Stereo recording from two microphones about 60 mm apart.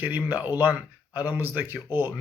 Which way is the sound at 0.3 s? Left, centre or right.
Right.